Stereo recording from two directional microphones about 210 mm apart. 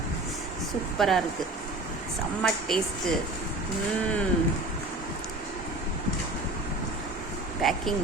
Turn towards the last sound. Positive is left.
turn(degrees=0)  # may be behind; listen again after turning